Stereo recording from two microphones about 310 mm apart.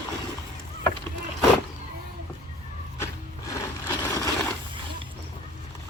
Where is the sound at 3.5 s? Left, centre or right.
Centre.